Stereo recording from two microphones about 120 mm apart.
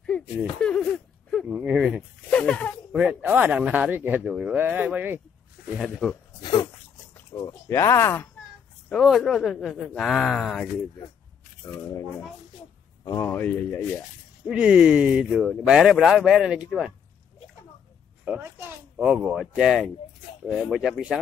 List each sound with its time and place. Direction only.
0.6 s speech: 10° left (ahead or behind)
1.5 s a sound: 10° right (ahead or behind)
1.8 s zipper: 5° right (ahead or behind)
2.3 s a sound: 10° left (ahead or behind)
2.9 s speech: 10° right (ahead or behind)
5.9 s speech: 5° left (ahead or behind)
7.3 s speech: 30° left (ahead or behind)
9.0 s speech: centre (ahead or behind)
13.0 s speech: 30° left (ahead or behind)
13.3 s speech: 10° left (ahead or behind)
14.5 s speech: 5° right (ahead or behind)
18.2 s speech: 15° right (ahead or behind)